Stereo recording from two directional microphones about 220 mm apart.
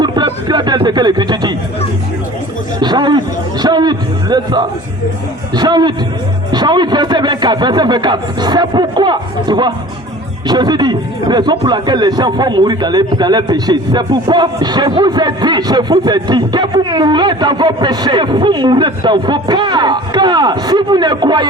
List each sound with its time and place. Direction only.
0.0 s speech: 20° right (ahead or behind)
2.8 s a man's voice: 20° right (ahead or behind)